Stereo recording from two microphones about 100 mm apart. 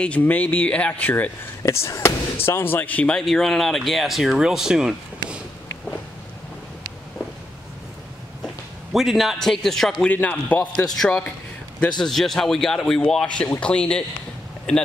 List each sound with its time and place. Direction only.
0.0 s speech: 15° left (ahead or behind)
1.6 s speech: 30° left (ahead or behind); by 5.4 s 5° right (ahead or behind)
8.9 s speech: centre (ahead or behind)
10.0 s speech: 15° left (ahead or behind)